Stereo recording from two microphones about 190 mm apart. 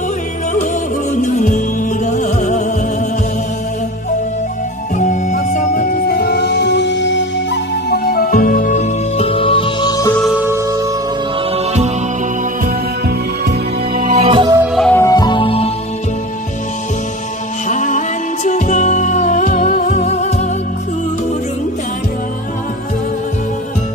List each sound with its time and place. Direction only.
1.1 s music: 40° left (ahead or behind)
4.9 s music: 40° left (ahead or behind); by 7.2 s 70° left (ahead or behind)
7.9 s music: 50° left (ahead or behind); by 10.1 s 20° left (ahead or behind)
10.1 s music: centre (ahead or behind)
10.4 s music: 15° right (ahead or behind)
11.5 s music: 35° right (ahead or behind)
13.9 s music: 40° right (ahead or behind)
14.5 s music: 10° right (ahead or behind)
14.8 s music: 10° left (ahead or behind); by 15.7 s 30° left (ahead or behind)
17.6 s music: 40° left (ahead or behind)